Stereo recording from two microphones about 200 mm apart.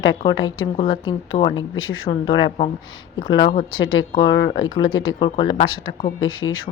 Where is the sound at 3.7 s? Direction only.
85° left.